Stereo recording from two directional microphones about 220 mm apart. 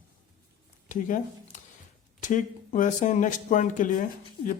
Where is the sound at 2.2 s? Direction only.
35° left (ahead or behind).